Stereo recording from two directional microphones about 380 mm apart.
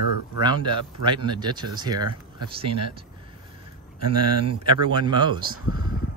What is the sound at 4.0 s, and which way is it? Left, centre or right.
Speech, right.